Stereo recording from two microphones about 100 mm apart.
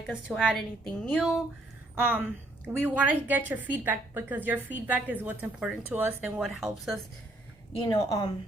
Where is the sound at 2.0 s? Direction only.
15° right (ahead or behind).